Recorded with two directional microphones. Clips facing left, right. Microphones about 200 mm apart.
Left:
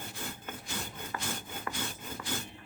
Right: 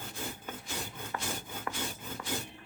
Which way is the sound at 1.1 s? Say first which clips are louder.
Right 1 dB; centre (ahead or behind).